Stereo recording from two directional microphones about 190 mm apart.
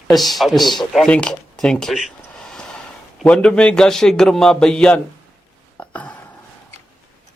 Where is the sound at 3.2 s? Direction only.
5° left (ahead or behind).